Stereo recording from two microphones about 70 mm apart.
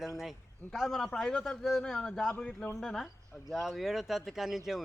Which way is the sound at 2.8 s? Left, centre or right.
Centre.